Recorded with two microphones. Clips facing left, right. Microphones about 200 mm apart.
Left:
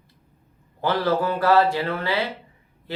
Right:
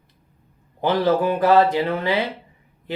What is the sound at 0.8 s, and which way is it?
Speech, 20° right (ahead or behind).